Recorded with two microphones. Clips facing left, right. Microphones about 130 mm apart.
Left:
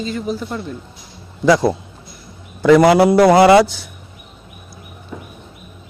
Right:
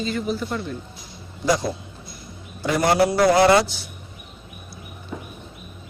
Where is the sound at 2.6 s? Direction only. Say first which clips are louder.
Left 9 dB; 90° left.